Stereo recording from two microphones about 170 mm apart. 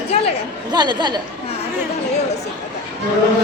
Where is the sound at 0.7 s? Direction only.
25° right (ahead or behind).